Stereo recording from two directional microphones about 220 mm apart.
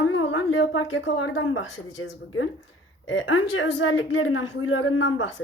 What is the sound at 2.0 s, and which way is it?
A woman's voice, 65° left (ahead or behind).